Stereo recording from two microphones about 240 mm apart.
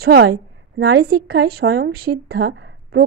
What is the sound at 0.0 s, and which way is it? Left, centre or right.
A woman's voice, right.